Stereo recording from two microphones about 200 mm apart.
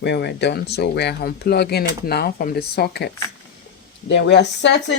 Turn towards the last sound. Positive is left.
turn(degrees=60)  # may be behind; listen again after turning